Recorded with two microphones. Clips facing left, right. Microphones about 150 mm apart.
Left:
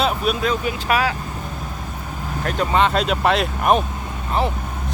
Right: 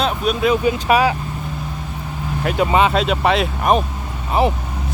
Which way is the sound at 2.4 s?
10° right (ahead or behind).